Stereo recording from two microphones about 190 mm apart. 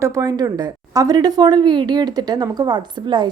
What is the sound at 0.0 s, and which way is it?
A woman's voice, 15° right (ahead or behind).